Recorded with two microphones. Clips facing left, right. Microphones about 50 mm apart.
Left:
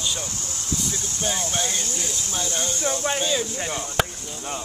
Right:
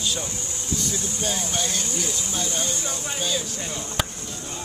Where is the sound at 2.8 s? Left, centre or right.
Left.